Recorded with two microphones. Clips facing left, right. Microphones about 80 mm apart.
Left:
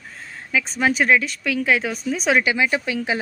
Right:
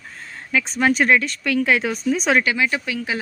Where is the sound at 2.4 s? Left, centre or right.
Left.